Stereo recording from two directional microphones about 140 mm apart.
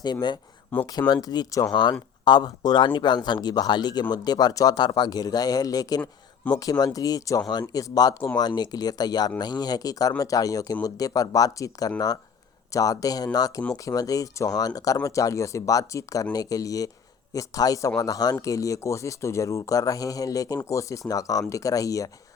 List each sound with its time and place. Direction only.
0.0 s speech: 30° left (ahead or behind)